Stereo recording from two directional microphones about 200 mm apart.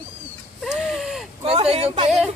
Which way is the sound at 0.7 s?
Centre (ahead or behind).